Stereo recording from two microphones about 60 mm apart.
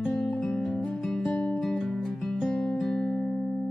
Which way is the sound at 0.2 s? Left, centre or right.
Centre.